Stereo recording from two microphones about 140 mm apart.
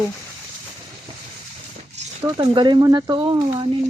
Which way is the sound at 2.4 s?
35° right (ahead or behind).